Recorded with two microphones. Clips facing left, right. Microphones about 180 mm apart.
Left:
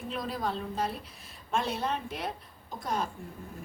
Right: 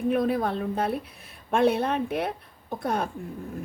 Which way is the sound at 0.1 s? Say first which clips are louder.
Right 8 dB; 55° right (ahead or behind).